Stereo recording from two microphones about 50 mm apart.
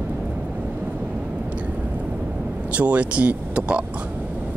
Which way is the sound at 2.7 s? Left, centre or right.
Right.